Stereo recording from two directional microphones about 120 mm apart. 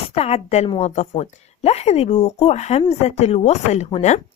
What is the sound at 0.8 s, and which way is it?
A woman's voice, 70° left (ahead or behind).